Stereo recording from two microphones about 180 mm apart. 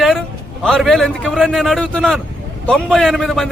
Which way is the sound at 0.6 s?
5° left (ahead or behind).